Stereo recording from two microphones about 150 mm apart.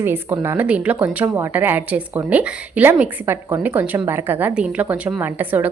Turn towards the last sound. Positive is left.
turn(degrees=-10)  # may be behind; listen again after turning